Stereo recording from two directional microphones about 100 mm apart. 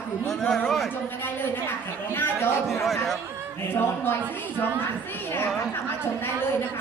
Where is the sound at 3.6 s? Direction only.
20° left (ahead or behind).